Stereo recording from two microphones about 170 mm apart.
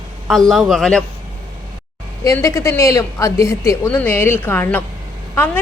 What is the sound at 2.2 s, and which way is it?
Speech, 15° left (ahead or behind).